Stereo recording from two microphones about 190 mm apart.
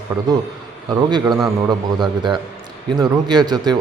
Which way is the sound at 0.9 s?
20° right (ahead or behind).